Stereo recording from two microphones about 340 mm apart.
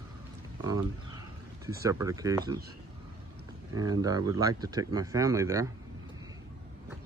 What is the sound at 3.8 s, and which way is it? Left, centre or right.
Speech, centre.